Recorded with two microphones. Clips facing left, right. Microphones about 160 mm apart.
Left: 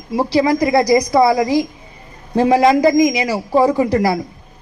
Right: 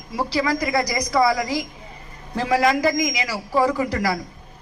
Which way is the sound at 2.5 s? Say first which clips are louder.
Left 6 dB; 30° left (ahead or behind).